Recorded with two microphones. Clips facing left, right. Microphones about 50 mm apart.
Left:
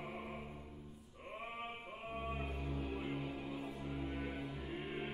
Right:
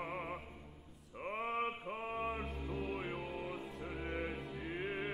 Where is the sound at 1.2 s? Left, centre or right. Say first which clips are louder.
Right 9 dB; right.